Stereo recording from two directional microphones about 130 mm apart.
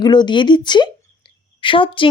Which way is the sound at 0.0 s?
35° left (ahead or behind).